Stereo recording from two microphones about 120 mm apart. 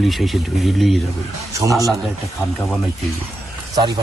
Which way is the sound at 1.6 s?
30° right (ahead or behind).